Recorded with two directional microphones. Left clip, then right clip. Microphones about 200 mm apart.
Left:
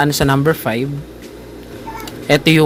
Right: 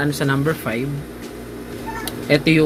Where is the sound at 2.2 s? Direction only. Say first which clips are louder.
Left 4 dB; 55° left (ahead or behind).